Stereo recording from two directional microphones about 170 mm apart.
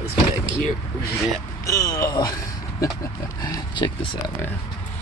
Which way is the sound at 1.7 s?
20° left (ahead or behind).